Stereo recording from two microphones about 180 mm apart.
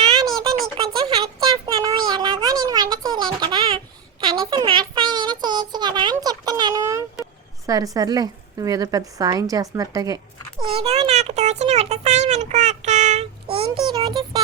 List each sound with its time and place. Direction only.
1.0 s a sound: 20° right (ahead or behind)
7.7 s a woman's voice: 20° right (ahead or behind)
10.6 s a child's voice: 35° right (ahead or behind)